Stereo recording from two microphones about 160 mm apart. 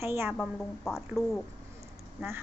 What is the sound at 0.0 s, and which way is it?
Speech, 15° right (ahead or behind).